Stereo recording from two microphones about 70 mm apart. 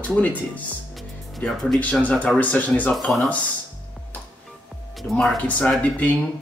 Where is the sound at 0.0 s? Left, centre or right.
Left.